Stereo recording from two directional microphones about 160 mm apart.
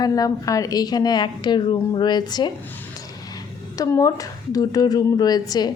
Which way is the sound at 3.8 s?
20° left (ahead or behind).